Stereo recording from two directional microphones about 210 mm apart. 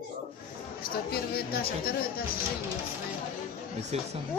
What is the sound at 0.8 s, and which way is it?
Speech, 45° left (ahead or behind).